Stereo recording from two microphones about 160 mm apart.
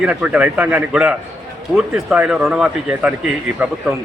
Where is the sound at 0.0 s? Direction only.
10° right (ahead or behind).